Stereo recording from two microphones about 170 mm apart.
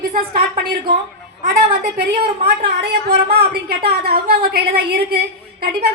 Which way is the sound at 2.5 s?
70° right (ahead or behind).